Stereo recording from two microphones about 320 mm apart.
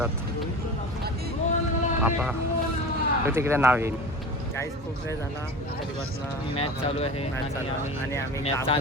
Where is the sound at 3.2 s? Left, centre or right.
Centre.